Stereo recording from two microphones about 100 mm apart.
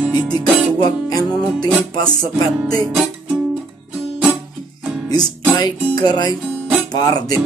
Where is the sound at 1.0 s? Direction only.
40° left (ahead or behind).